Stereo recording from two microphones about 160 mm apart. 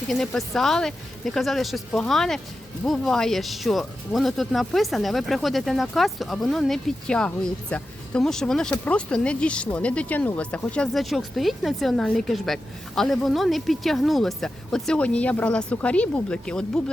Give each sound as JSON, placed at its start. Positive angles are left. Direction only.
{"t": 0.1, "sound": "speech", "side_deg": 0}